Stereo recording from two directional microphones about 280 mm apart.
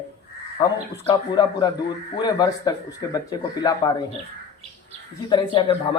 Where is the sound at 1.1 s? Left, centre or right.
Centre.